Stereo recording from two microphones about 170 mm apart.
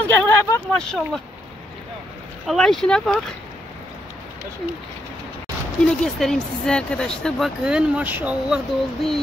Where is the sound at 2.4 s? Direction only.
Centre (ahead or behind).